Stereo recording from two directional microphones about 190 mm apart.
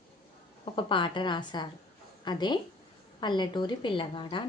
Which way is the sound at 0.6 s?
25° left (ahead or behind).